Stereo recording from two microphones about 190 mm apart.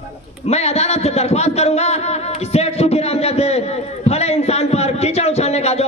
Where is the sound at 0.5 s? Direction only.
35° left (ahead or behind).